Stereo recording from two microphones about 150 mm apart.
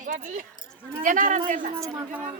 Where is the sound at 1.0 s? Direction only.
60° right (ahead or behind).